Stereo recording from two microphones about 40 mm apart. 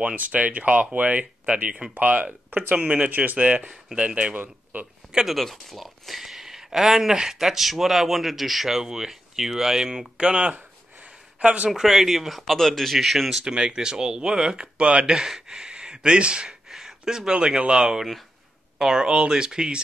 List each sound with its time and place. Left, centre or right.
0.0 s speech: right
4.7 s speech: right
5.4 s speech: centre
10.1 s speech: right
11.3 s speech: right
11.7 s speech: centre
13.5 s speech: centre
15.1 s speech: centre
16.6 s a sound: centre
17.3 s speech: right